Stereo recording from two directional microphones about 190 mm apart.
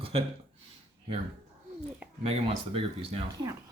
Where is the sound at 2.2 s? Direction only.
30° right (ahead or behind).